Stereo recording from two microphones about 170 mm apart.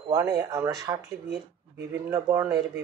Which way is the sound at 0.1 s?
25° right (ahead or behind).